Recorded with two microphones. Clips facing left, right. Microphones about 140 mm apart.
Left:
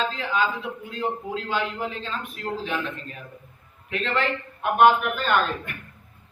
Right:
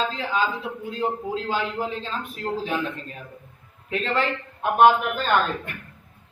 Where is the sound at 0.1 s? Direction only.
35° right (ahead or behind).